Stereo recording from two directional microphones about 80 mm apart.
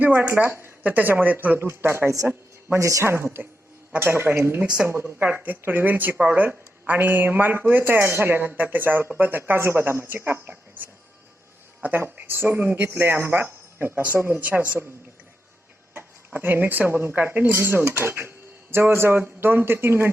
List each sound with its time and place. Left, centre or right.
0.0 s speech: right
2.7 s a woman's voice: right
3.0 s a woman's voice: right
4.6 s a woman's voice: centre
11.8 s speech: right
16.0 s speech: right